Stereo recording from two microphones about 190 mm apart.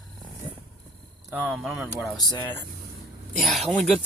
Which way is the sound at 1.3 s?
5° right (ahead or behind).